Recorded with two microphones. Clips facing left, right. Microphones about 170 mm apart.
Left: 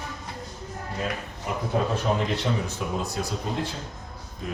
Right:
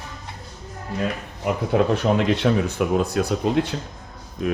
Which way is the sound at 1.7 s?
80° right.